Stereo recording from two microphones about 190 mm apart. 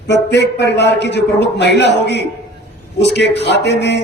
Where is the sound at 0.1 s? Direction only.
65° left (ahead or behind).